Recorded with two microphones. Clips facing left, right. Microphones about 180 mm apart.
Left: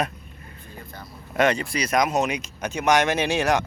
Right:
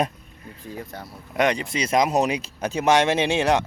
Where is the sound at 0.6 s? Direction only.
90° right.